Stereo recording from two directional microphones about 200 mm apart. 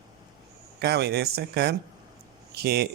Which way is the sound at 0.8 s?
55° right (ahead or behind).